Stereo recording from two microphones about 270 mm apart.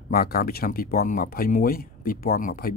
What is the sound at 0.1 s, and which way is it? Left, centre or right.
Speech, left.